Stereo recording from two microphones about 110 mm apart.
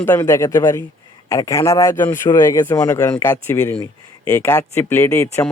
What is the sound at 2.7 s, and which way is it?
Speech, 35° left (ahead or behind).